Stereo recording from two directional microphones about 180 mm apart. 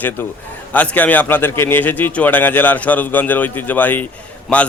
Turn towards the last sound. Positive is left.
turn(degrees=10)  # may be behind; listen again after turning